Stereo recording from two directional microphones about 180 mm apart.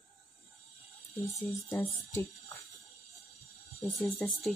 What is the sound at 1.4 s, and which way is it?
Speech, 15° left (ahead or behind).